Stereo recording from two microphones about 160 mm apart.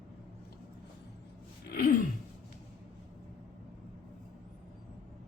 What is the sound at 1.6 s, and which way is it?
Gasp, 65° left (ahead or behind).